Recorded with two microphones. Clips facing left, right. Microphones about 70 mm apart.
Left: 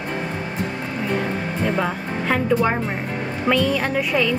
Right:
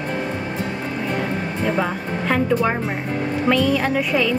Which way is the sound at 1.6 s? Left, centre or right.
Centre.